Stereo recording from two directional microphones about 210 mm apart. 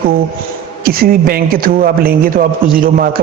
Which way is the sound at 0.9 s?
45° right (ahead or behind).